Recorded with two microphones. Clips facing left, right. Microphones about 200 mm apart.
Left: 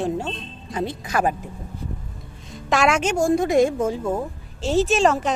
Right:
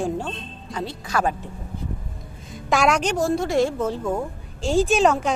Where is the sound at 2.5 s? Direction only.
Centre (ahead or behind).